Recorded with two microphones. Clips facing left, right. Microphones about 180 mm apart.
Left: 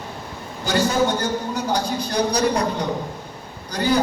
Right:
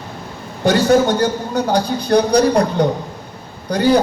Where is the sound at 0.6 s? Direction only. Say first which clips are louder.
Right 7 dB; 60° right (ahead or behind).